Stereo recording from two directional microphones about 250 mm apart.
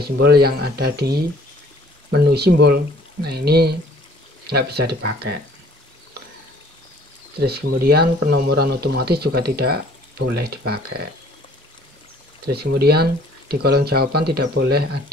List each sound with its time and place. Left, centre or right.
0.0 s speech: right
7.3 s speech: right
12.4 s speech: right